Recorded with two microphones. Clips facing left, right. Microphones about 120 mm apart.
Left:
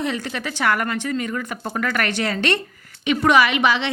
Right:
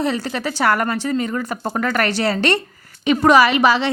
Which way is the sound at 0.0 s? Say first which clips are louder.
Right 4 dB; 35° right (ahead or behind).